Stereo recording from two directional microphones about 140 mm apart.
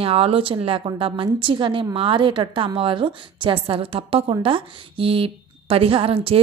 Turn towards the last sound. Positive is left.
turn(degrees=-40)  # may be behind; listen again after turning